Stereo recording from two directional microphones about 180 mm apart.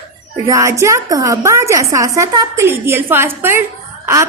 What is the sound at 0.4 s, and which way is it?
A woman's voice, 20° right (ahead or behind).